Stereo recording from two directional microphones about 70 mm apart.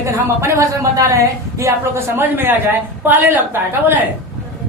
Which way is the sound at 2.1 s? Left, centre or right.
Right.